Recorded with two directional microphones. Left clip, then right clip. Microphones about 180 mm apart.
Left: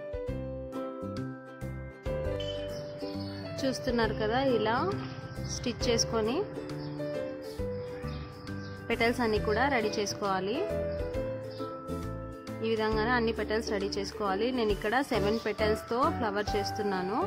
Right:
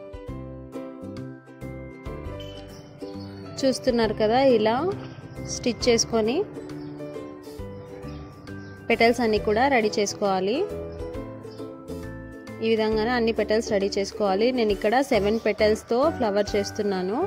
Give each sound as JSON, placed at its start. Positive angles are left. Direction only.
{"t": 3.5, "sound": "a woman's voice", "side_deg": -25}
{"t": 8.8, "sound": "a woman's voice", "side_deg": -30}
{"t": 12.6, "sound": "a woman's voice", "side_deg": -25}